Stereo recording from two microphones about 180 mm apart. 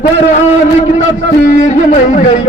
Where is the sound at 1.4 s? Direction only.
45° left (ahead or behind).